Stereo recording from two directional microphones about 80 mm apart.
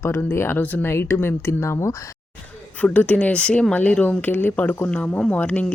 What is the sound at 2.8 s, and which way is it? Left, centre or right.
Speech, centre.